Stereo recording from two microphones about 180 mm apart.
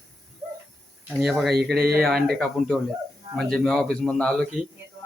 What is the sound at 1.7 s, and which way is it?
Speech, 60° right (ahead or behind).